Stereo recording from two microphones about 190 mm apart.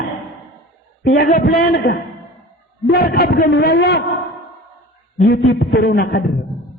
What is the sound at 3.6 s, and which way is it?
Speech, 60° left (ahead or behind).